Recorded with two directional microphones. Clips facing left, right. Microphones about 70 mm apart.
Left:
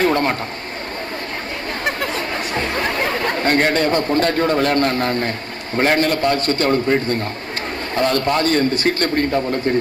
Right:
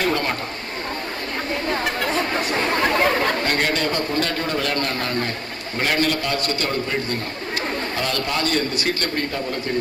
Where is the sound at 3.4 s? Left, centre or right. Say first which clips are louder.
Left 5 dB; left.